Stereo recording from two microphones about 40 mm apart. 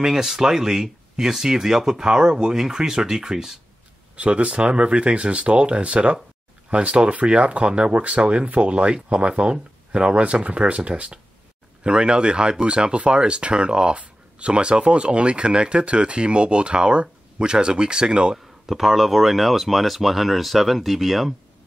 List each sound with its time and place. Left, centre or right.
0.0 s speech: centre
4.2 s speech: right
18.7 s speech: centre